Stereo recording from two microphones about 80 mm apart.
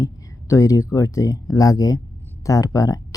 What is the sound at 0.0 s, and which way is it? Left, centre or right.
Speech, left.